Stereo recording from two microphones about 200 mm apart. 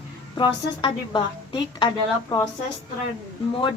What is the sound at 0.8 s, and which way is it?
A woman's voice, 25° left (ahead or behind).